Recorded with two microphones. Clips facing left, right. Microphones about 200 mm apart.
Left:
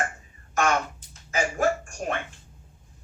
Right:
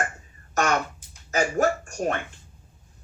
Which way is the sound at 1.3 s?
45° right (ahead or behind).